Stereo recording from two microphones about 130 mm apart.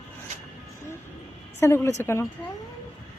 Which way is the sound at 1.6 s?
20° left (ahead or behind).